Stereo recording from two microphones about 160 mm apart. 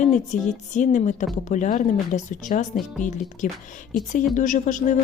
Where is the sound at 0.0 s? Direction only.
50° left (ahead or behind).